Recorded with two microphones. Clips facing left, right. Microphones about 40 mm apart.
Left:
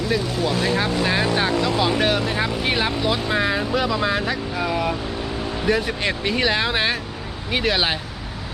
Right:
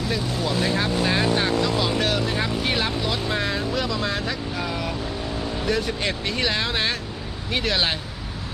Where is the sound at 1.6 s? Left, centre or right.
Centre.